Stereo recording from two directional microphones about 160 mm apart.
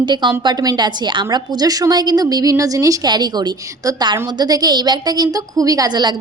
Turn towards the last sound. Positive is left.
turn(degrees=-30)  # may be behind; listen again after turning